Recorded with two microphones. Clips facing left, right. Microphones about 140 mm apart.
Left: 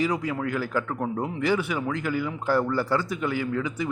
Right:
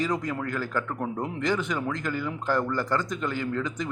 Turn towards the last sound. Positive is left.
turn(degrees=10)  # may be behind; listen again after turning